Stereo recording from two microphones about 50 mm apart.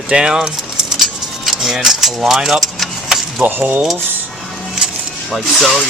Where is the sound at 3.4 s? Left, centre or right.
Right.